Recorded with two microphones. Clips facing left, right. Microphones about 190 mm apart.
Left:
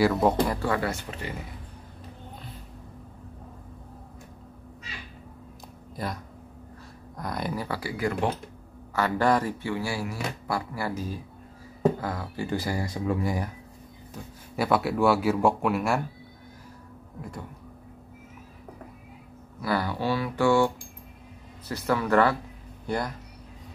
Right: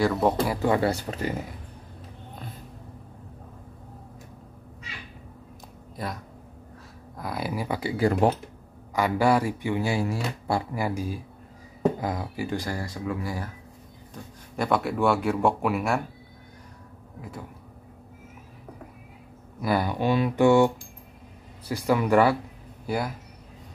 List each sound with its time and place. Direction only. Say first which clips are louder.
0.0 s speech: left 1 dB; centre (ahead or behind)
0.6 s speech: right 4 dB; 25° right (ahead or behind)
5.9 s speech: even; centre (ahead or behind); by 8.3 s 35° right (ahead or behind)
8.9 s speech: right 2 dB; 10° right (ahead or behind)
12.4 s speech: left 4 dB; 5° left (ahead or behind)
14.1 s speech: left 1 dB; 5° left (ahead or behind)
17.2 s speech: even; centre (ahead or behind)
19.6 s speech: right 3 dB; 15° right (ahead or behind)